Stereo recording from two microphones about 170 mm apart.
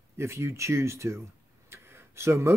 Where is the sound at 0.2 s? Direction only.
15° right (ahead or behind).